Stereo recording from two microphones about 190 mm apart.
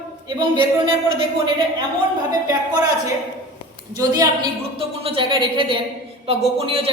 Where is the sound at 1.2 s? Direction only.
25° right (ahead or behind).